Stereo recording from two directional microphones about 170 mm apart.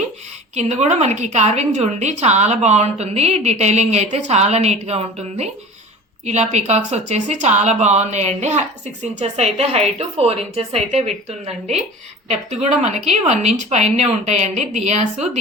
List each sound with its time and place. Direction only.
0.5 s a woman's voice: 40° right (ahead or behind)